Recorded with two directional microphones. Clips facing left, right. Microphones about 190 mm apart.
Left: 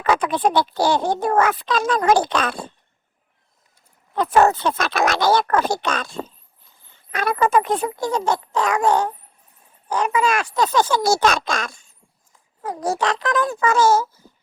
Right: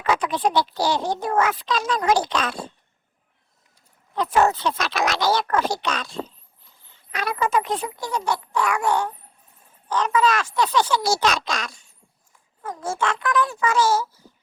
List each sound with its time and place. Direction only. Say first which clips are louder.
0.0 s speech: left 3 dB; 55° left (ahead or behind)
4.1 s speech: left 3 dB; 50° left (ahead or behind)
9.9 s speech: left 1 dB; 10° left (ahead or behind)
10.4 s speech: left 2 dB; 45° left (ahead or behind)
12.6 s a child's voice: left 4 dB; 35° left (ahead or behind)